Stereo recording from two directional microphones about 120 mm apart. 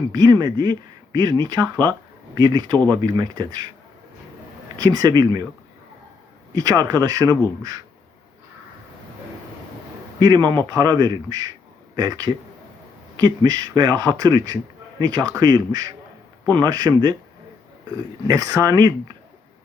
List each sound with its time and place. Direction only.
0.1 s speech: 30° right (ahead or behind)
4.8 s speech: 30° right (ahead or behind)
6.5 s speech: 30° right (ahead or behind)
10.2 s speech: 35° right (ahead or behind)
18.3 s speech: 30° right (ahead or behind)